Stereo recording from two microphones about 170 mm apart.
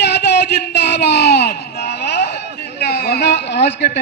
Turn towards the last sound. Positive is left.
turn(degrees=90)